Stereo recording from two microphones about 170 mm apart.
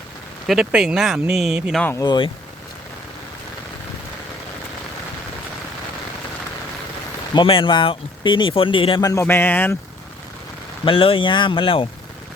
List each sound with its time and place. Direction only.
0.4 s speech: 5° right (ahead or behind)
1.8 s speech: 15° left (ahead or behind)
2.0 s speech: 30° left (ahead or behind)
7.3 s speech: 30° left (ahead or behind); by 9.7 s 10° left (ahead or behind)
10.8 s speech: 30° left (ahead or behind)